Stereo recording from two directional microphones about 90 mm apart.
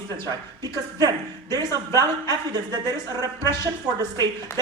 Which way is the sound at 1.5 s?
45° right (ahead or behind).